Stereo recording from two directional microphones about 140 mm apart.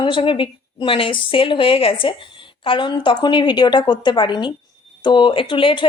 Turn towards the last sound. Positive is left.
turn(degrees=35)  # may be behind; listen again after turning